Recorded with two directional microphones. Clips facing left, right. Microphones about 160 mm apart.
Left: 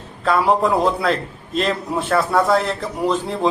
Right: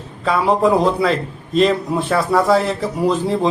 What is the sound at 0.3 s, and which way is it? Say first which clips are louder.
A man's voice: right 2 dB; centre (ahead or behind).